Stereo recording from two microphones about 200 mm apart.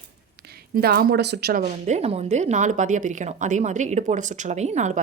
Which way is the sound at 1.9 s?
30° right (ahead or behind).